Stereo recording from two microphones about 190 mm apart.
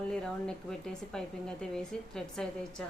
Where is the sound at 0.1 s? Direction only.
5° left (ahead or behind).